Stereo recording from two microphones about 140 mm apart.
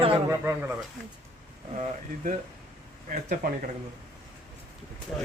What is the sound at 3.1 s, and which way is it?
Speech, 60° right (ahead or behind).